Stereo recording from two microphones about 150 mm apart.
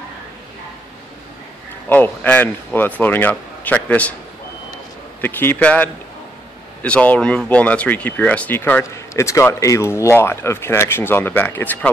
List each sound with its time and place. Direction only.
1.9 s speech: 10° left (ahead or behind)
5.2 s speech: 15° left (ahead or behind)